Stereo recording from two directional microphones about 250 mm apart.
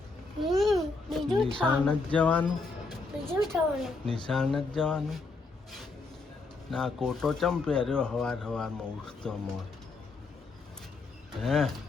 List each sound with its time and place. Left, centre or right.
0.3 s babbling: centre
1.3 s speech: centre
3.1 s a sound: centre
3.5 s speech: centre
6.7 s speech: centre
11.4 s speech: centre